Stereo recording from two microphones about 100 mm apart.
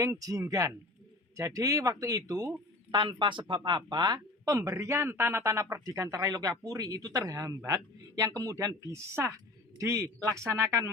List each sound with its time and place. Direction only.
0.0 s speech: 35° right (ahead or behind)
2.9 s speech: 50° right (ahead or behind); by 10.8 s 35° right (ahead or behind)